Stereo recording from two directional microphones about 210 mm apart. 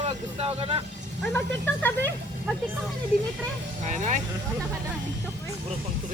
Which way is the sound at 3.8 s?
35° right (ahead or behind).